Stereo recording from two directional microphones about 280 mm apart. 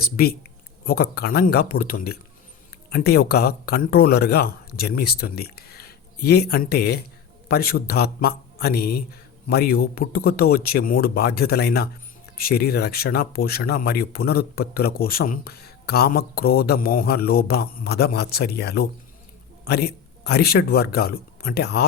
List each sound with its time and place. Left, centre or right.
0.0 s speech: left